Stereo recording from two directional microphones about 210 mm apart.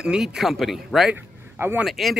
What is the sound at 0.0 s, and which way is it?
Speech, 5° right (ahead or behind).